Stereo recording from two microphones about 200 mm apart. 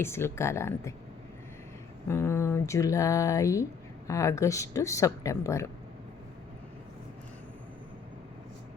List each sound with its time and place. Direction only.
0.0 s speech: 10° left (ahead or behind)
2.0 s speech: 15° left (ahead or behind)